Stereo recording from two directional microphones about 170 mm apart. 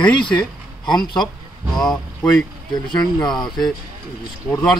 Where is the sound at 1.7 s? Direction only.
Centre (ahead or behind).